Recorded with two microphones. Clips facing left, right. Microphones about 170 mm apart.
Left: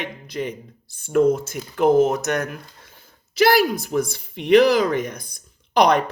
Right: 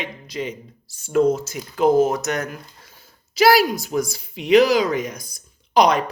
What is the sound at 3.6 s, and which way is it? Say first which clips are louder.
Speech: left 1 dB; 55° left (ahead or behind).